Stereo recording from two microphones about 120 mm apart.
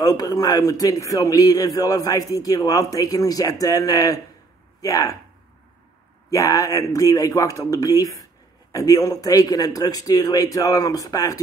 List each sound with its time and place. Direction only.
0.0 s a man's voice: 30° left (ahead or behind)
6.3 s a man's voice: 30° left (ahead or behind)